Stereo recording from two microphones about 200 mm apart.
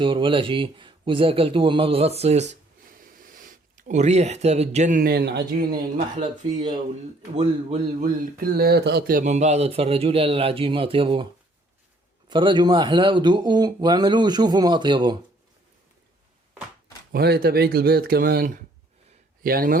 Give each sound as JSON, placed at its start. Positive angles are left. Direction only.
{"t": 0.0, "sound": "speech", "side_deg": -25}
{"t": 7.3, "sound": "speech", "side_deg": -35}
{"t": 8.4, "sound": "speech", "side_deg": -50}
{"t": 12.3, "sound": "speech", "side_deg": -25}
{"t": 17.1, "sound": "speech", "side_deg": -50}